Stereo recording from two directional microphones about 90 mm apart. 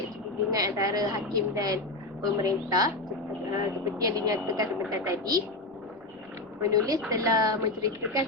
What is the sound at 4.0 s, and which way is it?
A woman's voice, 45° right (ahead or behind).